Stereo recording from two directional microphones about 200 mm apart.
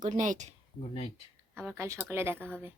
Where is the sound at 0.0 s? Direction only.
40° right (ahead or behind).